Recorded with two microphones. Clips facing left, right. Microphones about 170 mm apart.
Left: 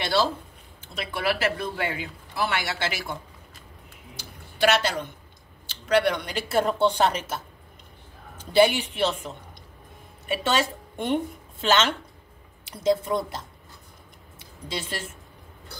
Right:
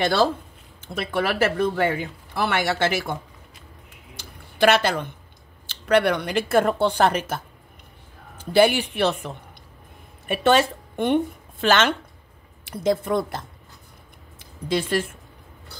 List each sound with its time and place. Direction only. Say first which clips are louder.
0.0 s speech: right 4 dB; 50° right (ahead or behind)
4.2 s a sound: right 4 dB; 55° right (ahead or behind)
5.9 s a woman's voice: right 3 dB; 55° right (ahead or behind)
12.6 s speech: right 1 dB; 55° right (ahead or behind)
14.7 s speech: right 10 dB; 55° right (ahead or behind)